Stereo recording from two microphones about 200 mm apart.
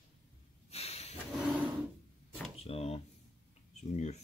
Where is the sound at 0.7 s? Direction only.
30° left (ahead or behind).